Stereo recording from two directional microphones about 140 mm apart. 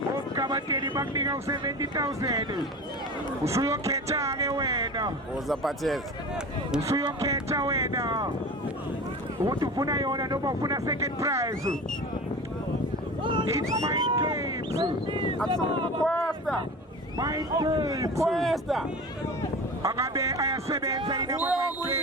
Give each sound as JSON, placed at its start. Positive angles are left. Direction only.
{"t": 0.3, "sound": "speech", "side_deg": -25}
{"t": 5.5, "sound": "speech", "side_deg": 0}
{"t": 6.8, "sound": "speech", "side_deg": -20}
{"t": 9.4, "sound": "speech", "side_deg": -25}
{"t": 13.2, "sound": "speech", "side_deg": -35}
{"t": 14.8, "sound": "speech", "side_deg": -35}
{"t": 16.0, "sound": "speech", "side_deg": 5}
{"t": 17.2, "sound": "speech", "side_deg": -25}
{"t": 18.3, "sound": "speech", "side_deg": 0}
{"t": 19.8, "sound": "speech", "side_deg": -20}